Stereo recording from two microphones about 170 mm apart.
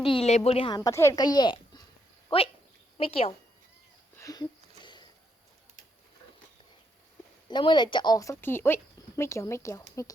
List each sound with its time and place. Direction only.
0.0 s speech: 35° left (ahead or behind)
0.8 s a child's voice: 15° left (ahead or behind); by 3.3 s 35° left (ahead or behind)
4.2 s speech: 20° left (ahead or behind)
4.8 s a sound: 25° left (ahead or behind)
7.4 s a woman's voice: 25° left (ahead or behind)